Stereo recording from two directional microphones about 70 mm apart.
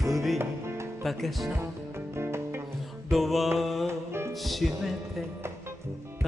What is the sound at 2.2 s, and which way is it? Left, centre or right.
Music, right.